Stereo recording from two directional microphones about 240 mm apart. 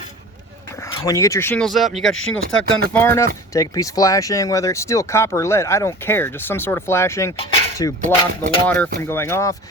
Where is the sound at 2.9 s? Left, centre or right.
Centre.